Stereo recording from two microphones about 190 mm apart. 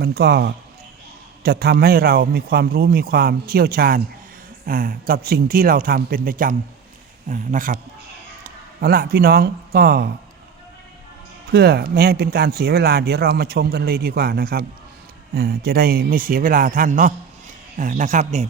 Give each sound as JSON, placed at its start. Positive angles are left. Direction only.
{"t": 0.0, "sound": "a man's voice", "side_deg": -55}
{"t": 11.5, "sound": "a man's voice", "side_deg": -55}